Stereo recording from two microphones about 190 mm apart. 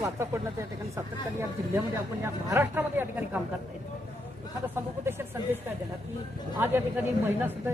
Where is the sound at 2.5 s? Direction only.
10° right (ahead or behind).